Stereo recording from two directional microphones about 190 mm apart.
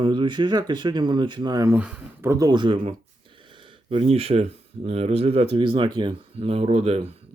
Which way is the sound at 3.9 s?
30° right (ahead or behind).